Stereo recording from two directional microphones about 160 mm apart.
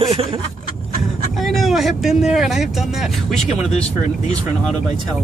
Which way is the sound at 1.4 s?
Centre (ahead or behind).